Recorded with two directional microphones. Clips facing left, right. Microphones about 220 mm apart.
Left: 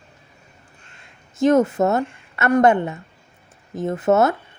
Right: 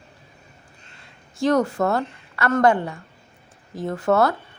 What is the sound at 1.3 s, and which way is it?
A woman's voice, 20° left (ahead or behind).